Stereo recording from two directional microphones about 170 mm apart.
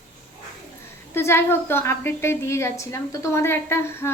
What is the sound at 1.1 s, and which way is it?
A woman's voice, 15° left (ahead or behind).